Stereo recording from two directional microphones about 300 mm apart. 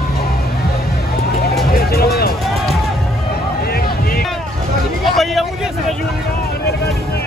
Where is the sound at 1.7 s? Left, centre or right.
Left.